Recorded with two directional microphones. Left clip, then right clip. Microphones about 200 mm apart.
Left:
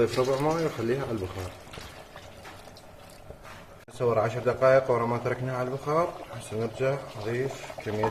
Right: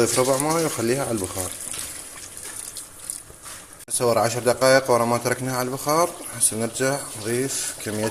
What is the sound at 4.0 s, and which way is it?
Speech, 40° right (ahead or behind).